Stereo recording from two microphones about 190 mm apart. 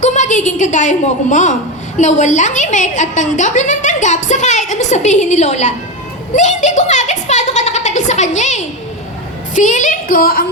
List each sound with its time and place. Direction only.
0.0 s a woman's voice: 40° left (ahead or behind)
6.3 s a sound: 40° left (ahead or behind)
8.4 s a woman's voice: 40° left (ahead or behind)